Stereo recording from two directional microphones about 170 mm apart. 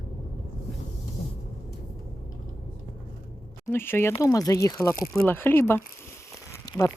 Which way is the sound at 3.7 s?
15° left (ahead or behind).